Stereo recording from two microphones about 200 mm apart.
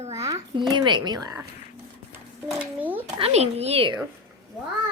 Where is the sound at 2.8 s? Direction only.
10° right (ahead or behind).